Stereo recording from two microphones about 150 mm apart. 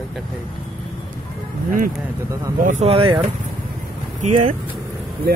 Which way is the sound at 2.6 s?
50° right (ahead or behind).